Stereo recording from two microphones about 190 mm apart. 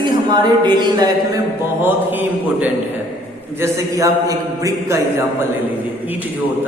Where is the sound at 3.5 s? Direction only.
15° right (ahead or behind).